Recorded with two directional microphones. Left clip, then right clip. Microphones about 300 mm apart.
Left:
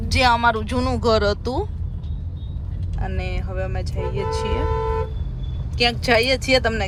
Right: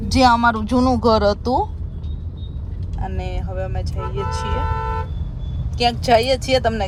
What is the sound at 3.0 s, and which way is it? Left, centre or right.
Speech, centre.